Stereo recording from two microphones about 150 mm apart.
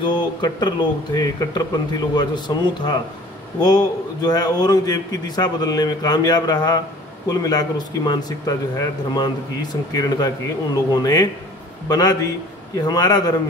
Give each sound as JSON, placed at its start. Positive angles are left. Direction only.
{"t": 0.0, "sound": "speech", "side_deg": 30}